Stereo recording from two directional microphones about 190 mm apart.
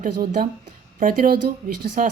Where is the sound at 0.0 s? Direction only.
45° right (ahead or behind).